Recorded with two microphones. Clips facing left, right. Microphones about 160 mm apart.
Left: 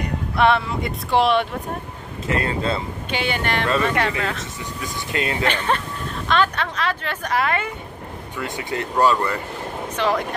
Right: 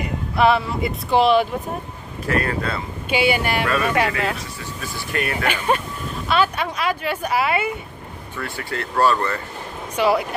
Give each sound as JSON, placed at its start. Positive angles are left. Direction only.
{"t": 0.0, "sound": "speech", "side_deg": -5}
{"t": 2.2, "sound": "speech", "side_deg": 25}
{"t": 3.1, "sound": "speech", "side_deg": -10}
{"t": 4.8, "sound": "speech", "side_deg": 20}
{"t": 5.4, "sound": "speech", "side_deg": -10}
{"t": 8.4, "sound": "speech", "side_deg": 20}
{"t": 9.9, "sound": "speech", "side_deg": -10}